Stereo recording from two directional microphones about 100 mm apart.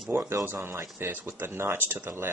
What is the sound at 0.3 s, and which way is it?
Speech, 30° right (ahead or behind).